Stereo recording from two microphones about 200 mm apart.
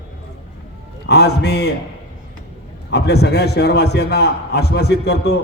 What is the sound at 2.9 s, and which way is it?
A man's voice, 55° left (ahead or behind).